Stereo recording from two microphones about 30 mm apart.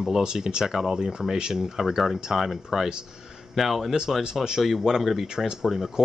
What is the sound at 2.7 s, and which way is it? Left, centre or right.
Speech, centre.